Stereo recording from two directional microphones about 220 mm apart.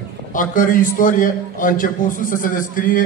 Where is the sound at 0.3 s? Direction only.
40° left (ahead or behind).